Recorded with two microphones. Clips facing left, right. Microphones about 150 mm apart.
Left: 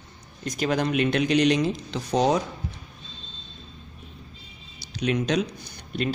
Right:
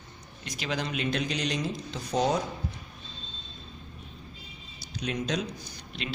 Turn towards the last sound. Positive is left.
turn(degrees=50)  # may be behind; listen again after turning